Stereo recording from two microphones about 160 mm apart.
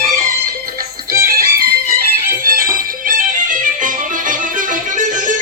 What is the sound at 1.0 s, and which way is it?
Music, 65° right (ahead or behind).